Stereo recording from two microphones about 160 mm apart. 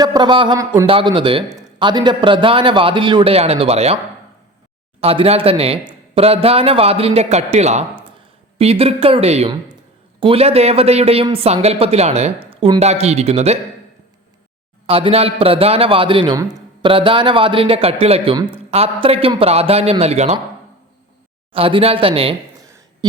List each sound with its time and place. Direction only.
0.0 s speech: 25° right (ahead or behind)
0.9 s speech: 35° right (ahead or behind)
4.9 s speech: 40° right (ahead or behind)
14.8 s speech: 35° right (ahead or behind)
21.5 s speech: 35° right (ahead or behind)
22.6 s a sound: 20° right (ahead or behind)